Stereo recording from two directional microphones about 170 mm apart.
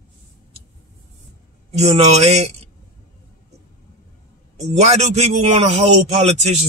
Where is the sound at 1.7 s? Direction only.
40° right (ahead or behind).